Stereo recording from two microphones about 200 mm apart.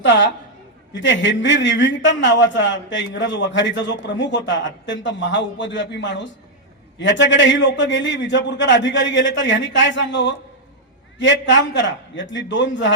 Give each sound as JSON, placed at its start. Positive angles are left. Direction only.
{"t": 0.0, "sound": "a man's voice", "side_deg": 65}